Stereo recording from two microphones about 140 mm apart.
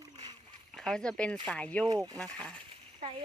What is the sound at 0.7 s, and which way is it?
Speech, 5° left (ahead or behind).